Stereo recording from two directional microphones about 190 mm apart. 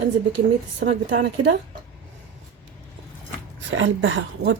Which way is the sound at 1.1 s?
65° right (ahead or behind).